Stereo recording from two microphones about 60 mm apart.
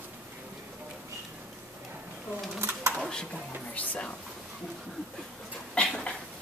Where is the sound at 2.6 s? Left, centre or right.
Right.